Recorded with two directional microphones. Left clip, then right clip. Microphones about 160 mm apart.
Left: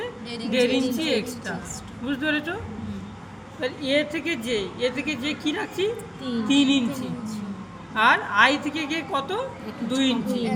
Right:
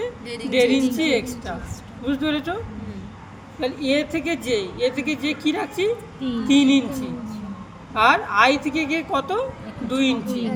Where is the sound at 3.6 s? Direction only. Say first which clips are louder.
Right 2 dB; 55° right (ahead or behind).